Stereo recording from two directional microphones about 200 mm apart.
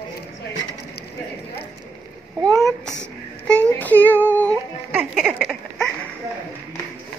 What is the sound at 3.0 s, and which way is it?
Female singing, 5° left (ahead or behind).